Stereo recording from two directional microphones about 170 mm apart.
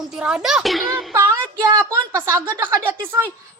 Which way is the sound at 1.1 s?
20° right (ahead or behind).